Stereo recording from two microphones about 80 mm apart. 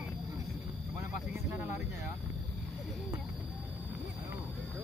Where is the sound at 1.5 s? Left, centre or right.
Right.